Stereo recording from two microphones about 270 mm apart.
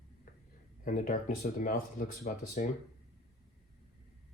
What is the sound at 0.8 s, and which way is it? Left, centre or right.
Speech, left.